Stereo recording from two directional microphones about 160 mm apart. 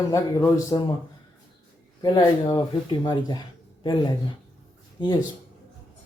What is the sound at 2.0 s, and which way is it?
Speech, 25° left (ahead or behind).